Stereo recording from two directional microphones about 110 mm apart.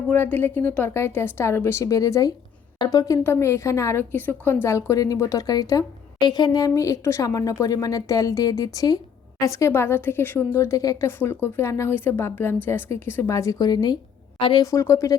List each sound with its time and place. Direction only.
0.1 s a woman's voice: 15° left (ahead or behind); by 3.2 s 35° left (ahead or behind)
3.2 s a woman's voice: 25° left (ahead or behind); by 14.0 s 40° left (ahead or behind)
14.3 s a woman's voice: 50° left (ahead or behind)
14.6 s a woman's voice: 25° left (ahead or behind)